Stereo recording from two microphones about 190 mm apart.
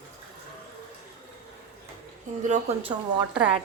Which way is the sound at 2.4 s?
40° right (ahead or behind).